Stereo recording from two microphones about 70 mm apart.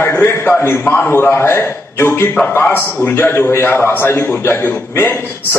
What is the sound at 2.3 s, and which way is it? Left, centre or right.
A man's voice, left.